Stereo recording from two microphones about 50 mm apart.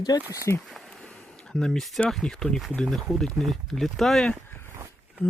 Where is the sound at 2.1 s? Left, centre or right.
Centre.